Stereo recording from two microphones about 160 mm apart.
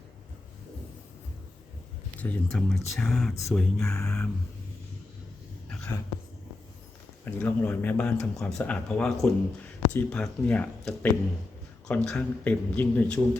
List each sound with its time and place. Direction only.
2.1 s speech: 5° left (ahead or behind)
3.8 s speech: 15° left (ahead or behind)
5.6 s whispering: 10° left (ahead or behind)
7.3 s speech: 10° left (ahead or behind)